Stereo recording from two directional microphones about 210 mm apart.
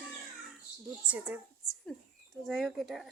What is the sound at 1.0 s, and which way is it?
Speech, 10° right (ahead or behind).